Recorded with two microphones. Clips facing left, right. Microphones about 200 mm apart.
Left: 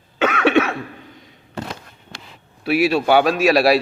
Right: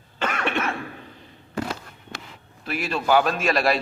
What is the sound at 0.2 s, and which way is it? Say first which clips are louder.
Cough: left 10 dB; 75° left (ahead or behind).